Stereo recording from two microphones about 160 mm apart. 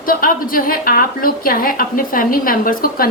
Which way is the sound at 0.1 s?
65° left (ahead or behind).